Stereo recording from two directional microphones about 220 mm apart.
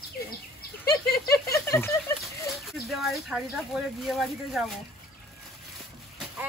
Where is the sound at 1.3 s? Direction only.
15° left (ahead or behind).